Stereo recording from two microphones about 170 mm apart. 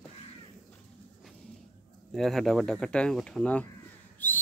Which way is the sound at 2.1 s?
Centre (ahead or behind).